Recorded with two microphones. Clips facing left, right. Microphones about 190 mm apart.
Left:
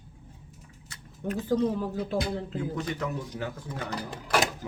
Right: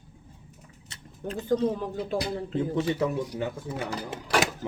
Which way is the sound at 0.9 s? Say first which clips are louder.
Left 2 dB; 30° right (ahead or behind).